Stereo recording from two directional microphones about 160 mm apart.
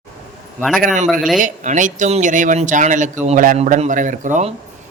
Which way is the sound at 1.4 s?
50° right (ahead or behind).